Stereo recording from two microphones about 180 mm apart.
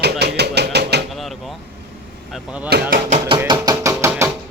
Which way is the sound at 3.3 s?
25° right (ahead or behind).